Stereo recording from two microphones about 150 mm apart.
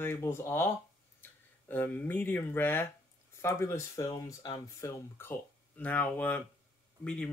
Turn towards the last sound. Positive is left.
turn(degrees=10)  # may be behind; listen again after turning